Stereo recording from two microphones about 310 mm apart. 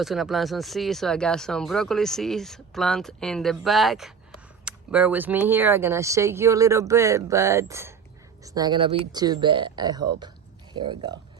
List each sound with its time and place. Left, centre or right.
0.0 s speech: centre